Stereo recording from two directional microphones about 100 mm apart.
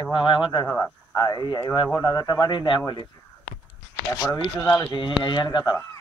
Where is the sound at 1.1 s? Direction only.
40° left (ahead or behind).